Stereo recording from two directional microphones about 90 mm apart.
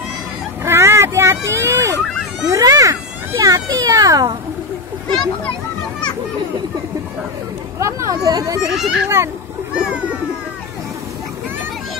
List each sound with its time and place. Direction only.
0.7 s a sound: 30° right (ahead or behind)
2.4 s speech: 40° right (ahead or behind)
7.8 s speech: 40° right (ahead or behind)
8.6 s a child's voice: 5° right (ahead or behind)
9.8 s music: 10° right (ahead or behind)